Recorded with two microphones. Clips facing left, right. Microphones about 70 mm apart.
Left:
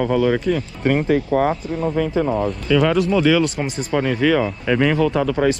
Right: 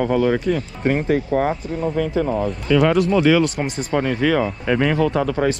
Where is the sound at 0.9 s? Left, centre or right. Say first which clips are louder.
Left 2 dB; left.